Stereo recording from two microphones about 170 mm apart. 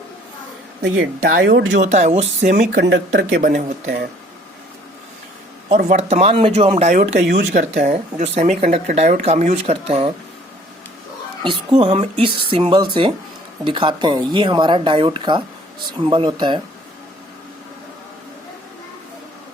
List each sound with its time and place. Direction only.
0.8 s speech: 90° right
1.8 s speech: 45° right (ahead or behind)
2.7 s speech: 90° right
3.4 s speech: 60° right (ahead or behind)
5.6 s speech: 45° right (ahead or behind)
11.4 s speech: 30° right (ahead or behind)